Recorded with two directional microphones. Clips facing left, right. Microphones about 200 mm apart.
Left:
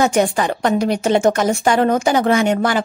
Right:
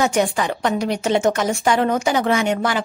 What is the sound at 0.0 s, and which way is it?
A woman's voice, 50° left (ahead or behind).